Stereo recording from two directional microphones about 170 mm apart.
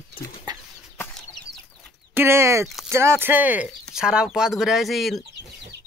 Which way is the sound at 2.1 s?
15° right (ahead or behind).